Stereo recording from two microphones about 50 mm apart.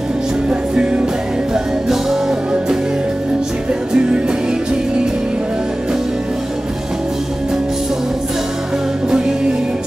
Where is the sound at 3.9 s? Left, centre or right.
Centre.